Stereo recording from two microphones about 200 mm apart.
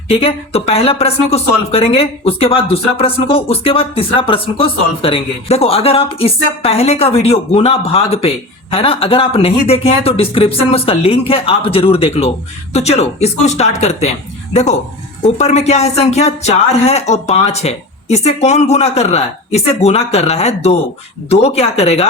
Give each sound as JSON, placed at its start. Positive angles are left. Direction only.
{"t": 0.1, "sound": "speech", "side_deg": 30}